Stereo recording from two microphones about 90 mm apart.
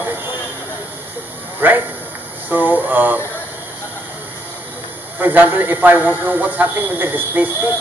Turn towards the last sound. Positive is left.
turn(degrees=-20)  # may be behind; listen again after turning